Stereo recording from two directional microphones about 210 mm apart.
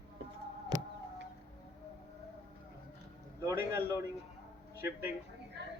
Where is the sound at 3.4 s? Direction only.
10° right (ahead or behind).